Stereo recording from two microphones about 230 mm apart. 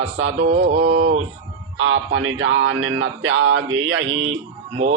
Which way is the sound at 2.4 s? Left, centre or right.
Right.